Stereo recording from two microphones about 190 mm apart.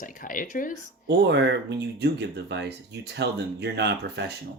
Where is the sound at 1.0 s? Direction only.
65° right (ahead or behind).